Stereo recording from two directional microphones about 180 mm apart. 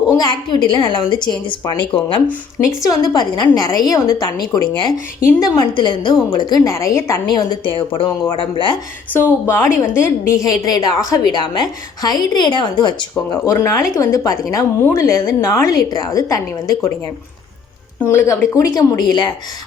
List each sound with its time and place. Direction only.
0.2 s a woman's voice: 25° left (ahead or behind)
9.1 s a woman's voice: 10° left (ahead or behind)
18.0 s a woman's voice: 10° left (ahead or behind)